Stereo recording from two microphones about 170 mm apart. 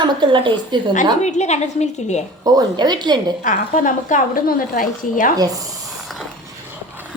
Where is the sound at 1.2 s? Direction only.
40° left (ahead or behind).